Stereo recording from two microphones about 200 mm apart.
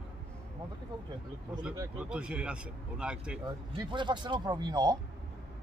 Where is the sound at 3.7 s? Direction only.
25° right (ahead or behind).